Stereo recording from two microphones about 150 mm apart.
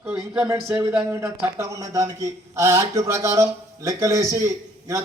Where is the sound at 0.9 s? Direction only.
5° right (ahead or behind).